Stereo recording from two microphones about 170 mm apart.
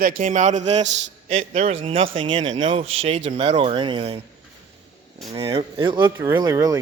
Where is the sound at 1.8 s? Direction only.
35° right (ahead or behind).